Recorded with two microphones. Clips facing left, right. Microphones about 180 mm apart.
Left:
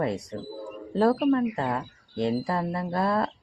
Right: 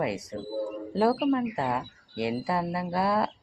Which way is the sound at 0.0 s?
5° right (ahead or behind).